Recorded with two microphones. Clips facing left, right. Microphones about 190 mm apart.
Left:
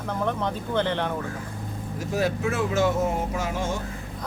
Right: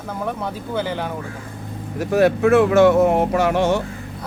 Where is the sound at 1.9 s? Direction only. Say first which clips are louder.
Right 9 dB; 65° right (ahead or behind).